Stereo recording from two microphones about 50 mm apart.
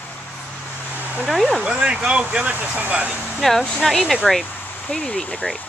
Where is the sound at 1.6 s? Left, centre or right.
Centre.